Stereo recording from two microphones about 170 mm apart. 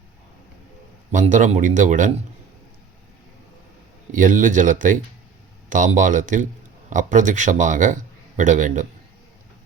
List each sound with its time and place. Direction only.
1.1 s a man's voice: 50° right (ahead or behind)
4.1 s a man's voice: 50° right (ahead or behind)